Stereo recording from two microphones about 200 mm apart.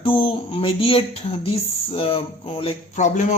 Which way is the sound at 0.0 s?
25° left (ahead or behind).